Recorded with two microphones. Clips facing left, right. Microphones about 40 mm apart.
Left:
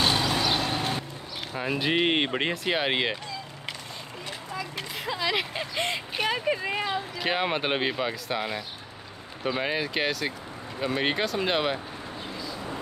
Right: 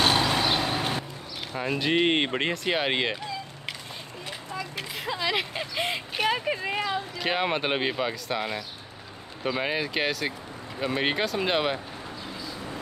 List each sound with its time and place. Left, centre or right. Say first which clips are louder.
0.0 s vehicle: right 2 dB; right
0.5 s vehicle: right 1 dB; centre
1.5 s speech: right 1 dB; centre
4.6 s speech: even; centre